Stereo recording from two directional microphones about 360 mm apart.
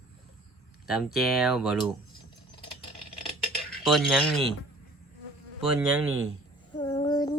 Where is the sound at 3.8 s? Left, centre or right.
Centre.